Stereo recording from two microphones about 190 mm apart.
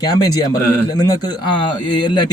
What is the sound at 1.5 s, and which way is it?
Speech, 25° left (ahead or behind).